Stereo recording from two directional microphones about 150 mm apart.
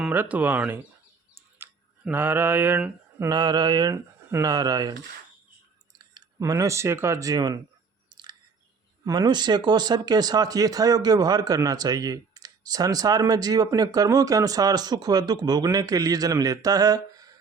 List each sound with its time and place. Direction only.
0.0 s speech: 10° right (ahead or behind)
1.4 s mantra: 15° right (ahead or behind)
6.1 s speech: 25° right (ahead or behind)
8.1 s chewing: 30° right (ahead or behind)
9.0 s speech: 25° right (ahead or behind)